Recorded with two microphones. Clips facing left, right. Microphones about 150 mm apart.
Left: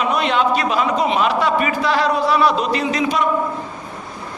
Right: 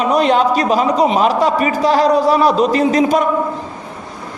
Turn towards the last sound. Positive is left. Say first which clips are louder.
# right 6 dB
turn(degrees=-45)  # may be behind; listen again after turning